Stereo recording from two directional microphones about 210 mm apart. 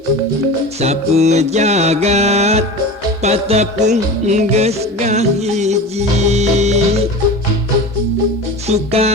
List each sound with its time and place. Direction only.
0.8 s music: 30° right (ahead or behind)
8.6 s music: 30° right (ahead or behind)